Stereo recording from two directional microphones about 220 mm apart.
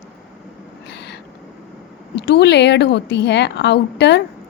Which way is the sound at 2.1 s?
50° left (ahead or behind).